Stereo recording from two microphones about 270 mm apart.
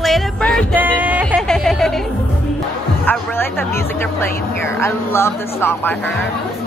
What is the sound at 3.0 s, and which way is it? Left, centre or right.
Speech, centre.